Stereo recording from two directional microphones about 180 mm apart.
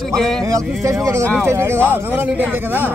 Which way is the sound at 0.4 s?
15° right (ahead or behind).